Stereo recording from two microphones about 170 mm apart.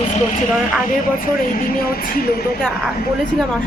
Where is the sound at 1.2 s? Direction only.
55° left (ahead or behind).